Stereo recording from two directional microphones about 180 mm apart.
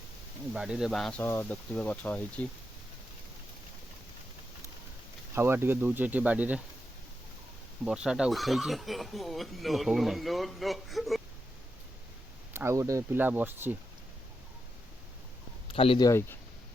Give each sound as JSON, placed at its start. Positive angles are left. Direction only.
{"t": 0.5, "sound": "speech", "side_deg": -5}
{"t": 1.2, "sound": "speech", "side_deg": 10}
{"t": 5.3, "sound": "speech", "side_deg": -15}
{"t": 7.9, "sound": "speech", "side_deg": -5}
{"t": 12.5, "sound": "speech", "side_deg": -15}
{"t": 15.6, "sound": "speech", "side_deg": 30}
{"t": 16.0, "sound": "speech", "side_deg": 15}